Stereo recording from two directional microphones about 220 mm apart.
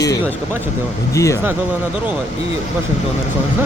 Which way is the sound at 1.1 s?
15° left (ahead or behind).